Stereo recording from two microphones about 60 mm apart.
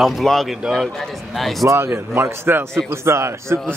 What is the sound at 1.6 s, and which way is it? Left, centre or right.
A man's voice, right.